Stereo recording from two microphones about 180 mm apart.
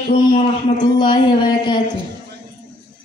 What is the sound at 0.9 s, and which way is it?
Speech, 25° left (ahead or behind).